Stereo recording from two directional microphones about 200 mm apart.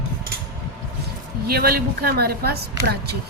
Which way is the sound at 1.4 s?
50° right (ahead or behind).